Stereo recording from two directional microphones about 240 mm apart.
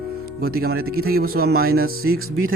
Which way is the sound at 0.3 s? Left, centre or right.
Right.